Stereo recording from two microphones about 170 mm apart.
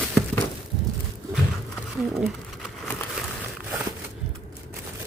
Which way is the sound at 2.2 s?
Centre (ahead or behind).